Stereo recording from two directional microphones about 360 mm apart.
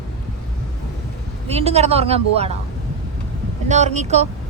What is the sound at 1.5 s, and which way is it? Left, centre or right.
Speech, centre.